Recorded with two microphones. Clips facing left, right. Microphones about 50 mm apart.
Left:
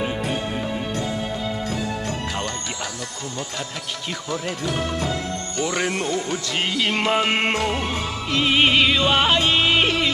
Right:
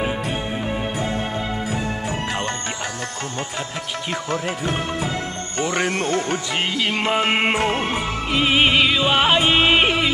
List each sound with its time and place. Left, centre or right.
4.3 s music: right
6.5 s music: centre
7.2 s music: centre
7.6 s music: right
8.3 s music: centre
9.3 s music: centre